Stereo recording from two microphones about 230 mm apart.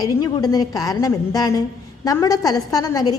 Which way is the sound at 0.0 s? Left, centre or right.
Centre.